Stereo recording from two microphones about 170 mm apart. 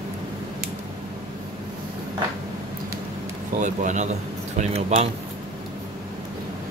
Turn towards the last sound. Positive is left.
turn(degrees=-35)  # may be behind; listen again after turning